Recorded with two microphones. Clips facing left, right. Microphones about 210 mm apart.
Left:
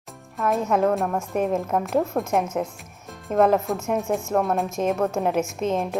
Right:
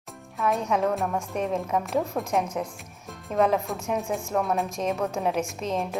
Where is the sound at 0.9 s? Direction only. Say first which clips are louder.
Left 4 dB; centre (ahead or behind).